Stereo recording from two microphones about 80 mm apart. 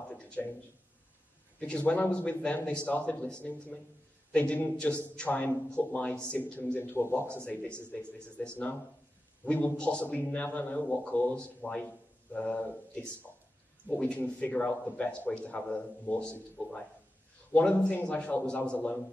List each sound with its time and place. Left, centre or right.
0.1 s speech: centre
1.6 s a man's voice: centre
6.8 s a man's voice: left
7.3 s a man's voice: centre